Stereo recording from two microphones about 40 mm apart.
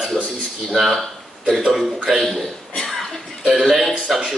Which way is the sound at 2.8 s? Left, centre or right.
Centre.